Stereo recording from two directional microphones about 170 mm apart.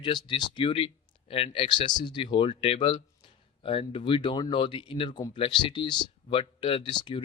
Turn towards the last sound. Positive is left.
turn(degrees=30)  # may be behind; listen again after turning